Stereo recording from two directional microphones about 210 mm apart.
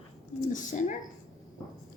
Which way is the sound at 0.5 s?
35° left (ahead or behind).